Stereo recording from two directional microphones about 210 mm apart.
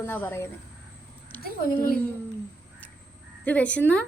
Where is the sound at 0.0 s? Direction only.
10° left (ahead or behind).